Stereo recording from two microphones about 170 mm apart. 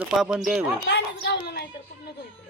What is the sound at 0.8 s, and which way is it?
Speech, 80° left.